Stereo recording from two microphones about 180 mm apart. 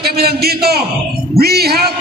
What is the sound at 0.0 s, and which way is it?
A man's voice, 60° right (ahead or behind).